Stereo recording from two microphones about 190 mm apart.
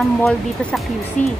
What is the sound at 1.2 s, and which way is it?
Speech, 40° left (ahead or behind).